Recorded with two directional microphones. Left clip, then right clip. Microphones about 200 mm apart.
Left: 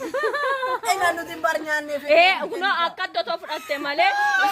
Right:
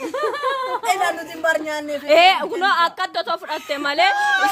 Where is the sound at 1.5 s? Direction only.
25° right (ahead or behind).